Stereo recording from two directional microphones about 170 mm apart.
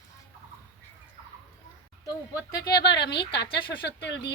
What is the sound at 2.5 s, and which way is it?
Speech, 25° left (ahead or behind).